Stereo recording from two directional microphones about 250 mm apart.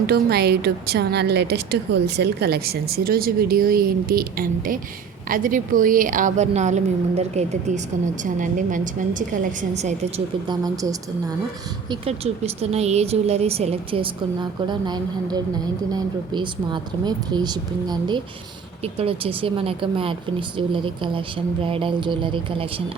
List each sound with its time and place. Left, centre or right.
0.1 s a woman's voice: right
10.5 s speech: centre